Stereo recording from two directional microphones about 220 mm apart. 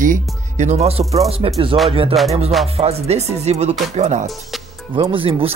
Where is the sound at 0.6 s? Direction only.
30° right (ahead or behind).